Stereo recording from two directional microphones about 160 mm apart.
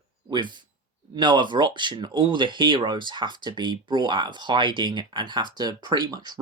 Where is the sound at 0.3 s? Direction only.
30° right (ahead or behind).